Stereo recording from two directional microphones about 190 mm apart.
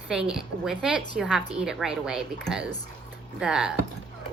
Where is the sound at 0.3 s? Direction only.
5° right (ahead or behind).